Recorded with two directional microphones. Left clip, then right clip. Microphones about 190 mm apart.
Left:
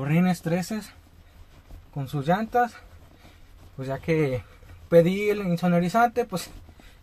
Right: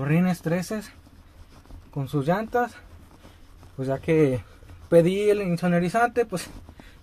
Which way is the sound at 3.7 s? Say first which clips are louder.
Right 4 dB; centre (ahead or behind).